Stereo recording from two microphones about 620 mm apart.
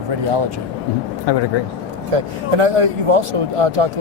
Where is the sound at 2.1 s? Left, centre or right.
Right.